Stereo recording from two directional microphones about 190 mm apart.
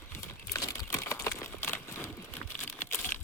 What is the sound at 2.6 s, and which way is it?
Crumpling, 10° left (ahead or behind).